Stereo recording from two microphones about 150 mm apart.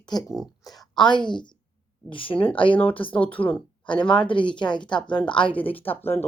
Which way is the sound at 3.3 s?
10° left (ahead or behind).